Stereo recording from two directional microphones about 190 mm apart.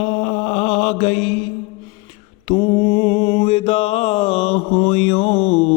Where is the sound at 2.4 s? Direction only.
30° left (ahead or behind).